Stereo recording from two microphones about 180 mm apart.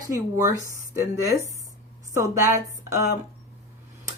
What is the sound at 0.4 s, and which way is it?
A woman's voice, 15° right (ahead or behind).